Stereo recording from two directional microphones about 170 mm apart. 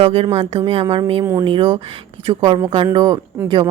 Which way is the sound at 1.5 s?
30° right (ahead or behind).